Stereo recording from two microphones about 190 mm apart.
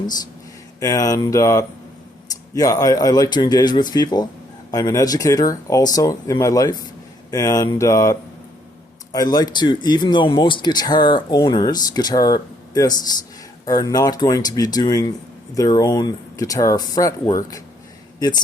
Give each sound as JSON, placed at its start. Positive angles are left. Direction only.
{"t": 0.8, "sound": "speech", "side_deg": 20}
{"t": 9.1, "sound": "speech", "side_deg": 20}